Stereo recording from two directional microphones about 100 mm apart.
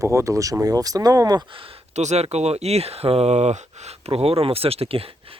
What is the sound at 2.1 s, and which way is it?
Speech, 90° right.